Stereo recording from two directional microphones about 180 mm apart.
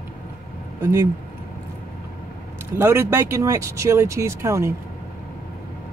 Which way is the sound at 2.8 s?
15° right (ahead or behind).